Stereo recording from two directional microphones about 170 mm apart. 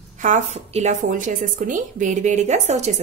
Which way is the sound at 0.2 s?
45° right (ahead or behind).